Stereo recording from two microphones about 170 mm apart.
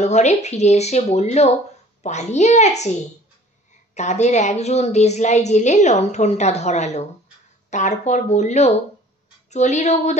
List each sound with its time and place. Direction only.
0.0 s a woman's voice: 40° left (ahead or behind)
3.9 s a woman's voice: 45° left (ahead or behind)